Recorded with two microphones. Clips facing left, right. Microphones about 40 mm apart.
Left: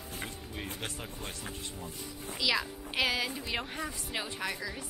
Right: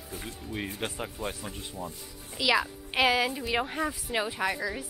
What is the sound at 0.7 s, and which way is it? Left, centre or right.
Speech, centre.